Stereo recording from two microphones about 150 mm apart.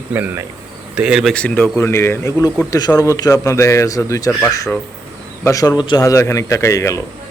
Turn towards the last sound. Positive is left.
turn(degrees=20)  # may be behind; listen again after turning